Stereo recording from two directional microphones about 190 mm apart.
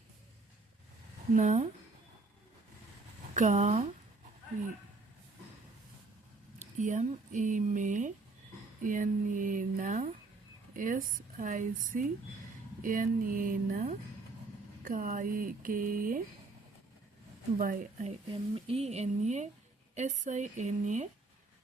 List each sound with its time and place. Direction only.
1.3 s speech: 40° right (ahead or behind)
3.3 s speech: 40° right (ahead or behind)
6.7 s speech: 40° right (ahead or behind)
17.6 s speech: 45° right (ahead or behind)
18.3 s speech: 30° right (ahead or behind)